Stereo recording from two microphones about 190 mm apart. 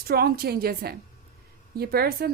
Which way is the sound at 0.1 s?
55° right (ahead or behind).